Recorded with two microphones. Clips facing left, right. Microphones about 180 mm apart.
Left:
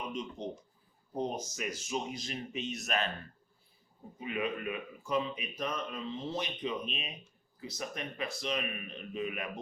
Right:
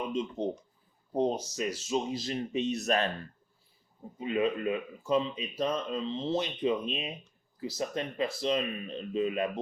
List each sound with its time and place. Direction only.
0.1 s speech: 25° right (ahead or behind)
4.2 s speech: 30° right (ahead or behind)